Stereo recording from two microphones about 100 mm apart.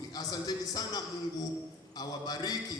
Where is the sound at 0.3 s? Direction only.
40° left (ahead or behind).